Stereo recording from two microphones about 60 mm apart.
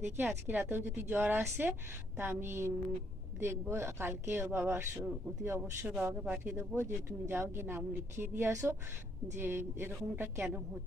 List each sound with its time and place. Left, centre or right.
0.0 s a woman's voice: right
6.2 s speech: right
6.7 s a woman's voice: right
8.5 s a woman's voice: right
9.4 s speech: right